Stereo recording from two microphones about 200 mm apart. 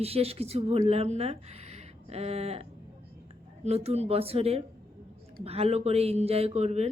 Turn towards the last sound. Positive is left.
turn(degrees=-35)  # may be behind; listen again after turning